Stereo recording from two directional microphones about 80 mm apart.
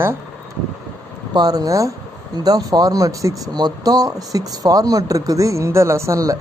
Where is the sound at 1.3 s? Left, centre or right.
Right.